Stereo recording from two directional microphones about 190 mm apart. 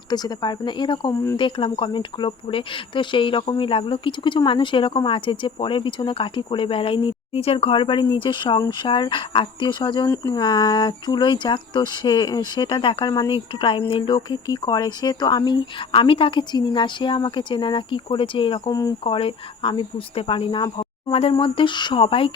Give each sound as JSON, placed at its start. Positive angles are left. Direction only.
{"t": 0.1, "sound": "speech", "side_deg": 20}